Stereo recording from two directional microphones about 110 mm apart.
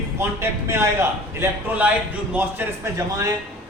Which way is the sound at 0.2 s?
25° right (ahead or behind).